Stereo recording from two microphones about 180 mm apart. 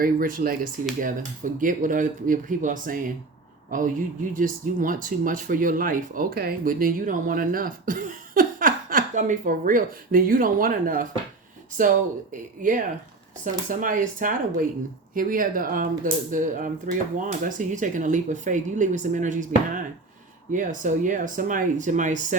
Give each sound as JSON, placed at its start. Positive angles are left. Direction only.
{"t": 0.0, "sound": "speech", "side_deg": -50}
{"t": 20.5, "sound": "speech", "side_deg": -45}